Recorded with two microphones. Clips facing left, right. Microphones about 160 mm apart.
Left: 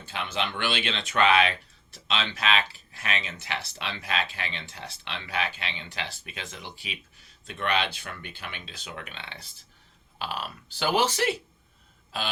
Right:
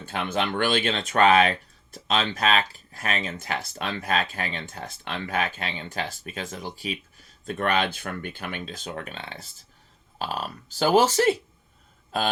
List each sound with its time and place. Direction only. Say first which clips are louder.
0.0 s speech: right 4 dB; 50° right (ahead or behind)